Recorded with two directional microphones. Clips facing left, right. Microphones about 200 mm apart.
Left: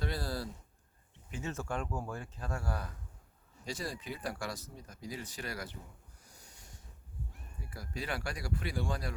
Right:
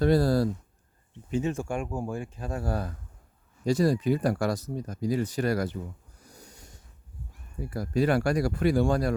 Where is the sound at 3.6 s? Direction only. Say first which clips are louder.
Right 17 dB; 40° right (ahead or behind).